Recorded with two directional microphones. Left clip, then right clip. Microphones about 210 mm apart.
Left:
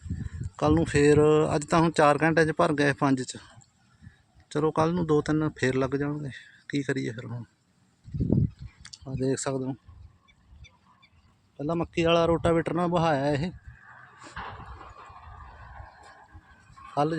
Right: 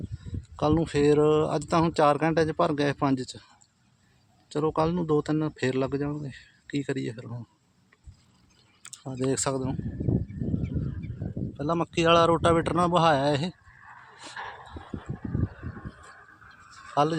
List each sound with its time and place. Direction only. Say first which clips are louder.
0.5 s speech: left 1 dB; centre (ahead or behind)
4.4 s speech: left 1 dB; centre (ahead or behind)
8.8 s speech: even; centre (ahead or behind)
11.5 s speech: right 1 dB; 5° right (ahead or behind)
14.3 s a sound: right 1 dB; 45° left (ahead or behind)
16.9 s speech: right 2 dB; centre (ahead or behind)